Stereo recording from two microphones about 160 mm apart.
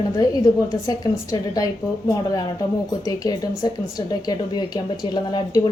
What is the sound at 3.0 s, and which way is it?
A woman's voice, 25° left (ahead or behind).